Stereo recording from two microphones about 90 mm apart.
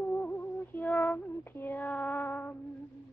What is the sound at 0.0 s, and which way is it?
Music, 20° left (ahead or behind).